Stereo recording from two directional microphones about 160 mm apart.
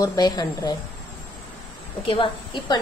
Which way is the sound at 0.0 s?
25° left (ahead or behind).